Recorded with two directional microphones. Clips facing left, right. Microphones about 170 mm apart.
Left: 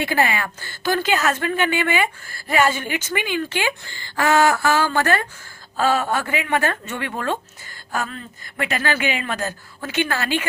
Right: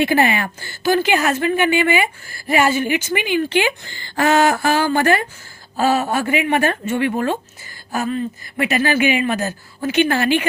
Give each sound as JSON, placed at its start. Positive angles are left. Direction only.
{"t": 0.0, "sound": "a woman's voice", "side_deg": -20}
{"t": 0.6, "sound": "speech", "side_deg": -10}